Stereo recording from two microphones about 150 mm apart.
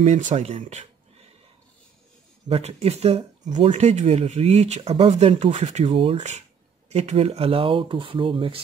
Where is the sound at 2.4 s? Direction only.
45° right (ahead or behind).